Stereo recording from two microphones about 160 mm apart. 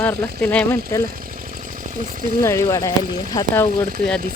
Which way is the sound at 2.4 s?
20° left (ahead or behind).